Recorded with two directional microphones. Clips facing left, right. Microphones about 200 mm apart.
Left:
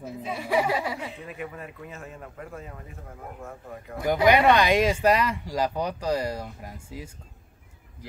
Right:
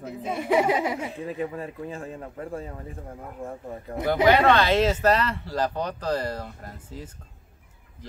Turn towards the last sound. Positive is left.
turn(degrees=10)  # may be behind; listen again after turning